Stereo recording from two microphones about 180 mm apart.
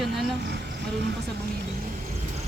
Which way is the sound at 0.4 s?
65° right (ahead or behind).